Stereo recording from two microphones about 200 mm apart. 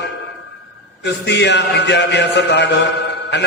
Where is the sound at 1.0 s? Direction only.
60° left (ahead or behind).